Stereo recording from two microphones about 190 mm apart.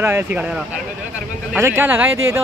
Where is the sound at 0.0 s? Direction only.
10° right (ahead or behind).